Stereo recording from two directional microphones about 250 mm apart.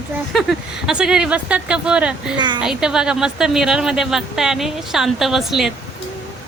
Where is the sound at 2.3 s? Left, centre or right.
Centre.